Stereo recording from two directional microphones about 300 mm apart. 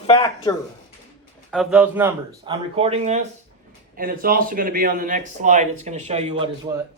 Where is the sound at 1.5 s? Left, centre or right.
Centre.